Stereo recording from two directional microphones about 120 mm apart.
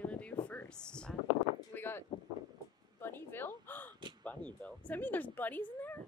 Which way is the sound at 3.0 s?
20° left (ahead or behind).